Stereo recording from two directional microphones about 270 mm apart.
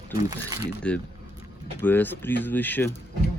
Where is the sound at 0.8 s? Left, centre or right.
Centre.